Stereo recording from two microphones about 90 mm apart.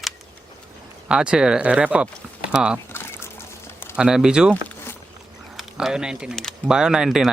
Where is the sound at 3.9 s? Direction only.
5° right (ahead or behind).